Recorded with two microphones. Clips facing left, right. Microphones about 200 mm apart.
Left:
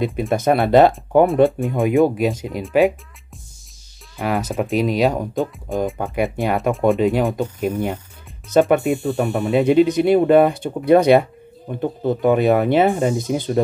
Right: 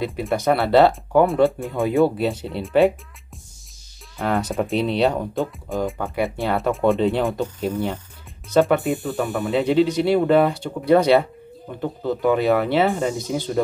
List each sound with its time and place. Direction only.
0.0 s speech: 20° left (ahead or behind)
4.2 s speech: 10° left (ahead or behind)
5.3 s speech: centre (ahead or behind)
6.1 s speech: 15° left (ahead or behind)